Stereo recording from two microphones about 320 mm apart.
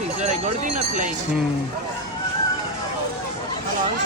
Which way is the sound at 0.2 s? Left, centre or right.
Right.